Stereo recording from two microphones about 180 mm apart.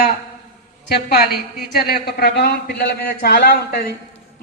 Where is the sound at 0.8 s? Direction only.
60° left (ahead or behind).